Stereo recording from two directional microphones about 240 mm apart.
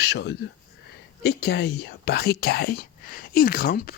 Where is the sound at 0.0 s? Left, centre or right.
Left.